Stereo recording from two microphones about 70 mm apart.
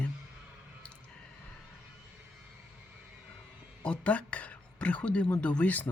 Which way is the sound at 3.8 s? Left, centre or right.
Centre.